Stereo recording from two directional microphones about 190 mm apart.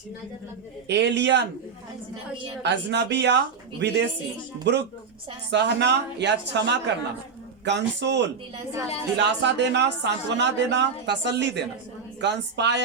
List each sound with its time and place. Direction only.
0.9 s speech: 65° right (ahead or behind)
2.6 s speech: 65° right (ahead or behind)
8.5 s speech: 15° right (ahead or behind)
9.1 s speech: 65° right (ahead or behind)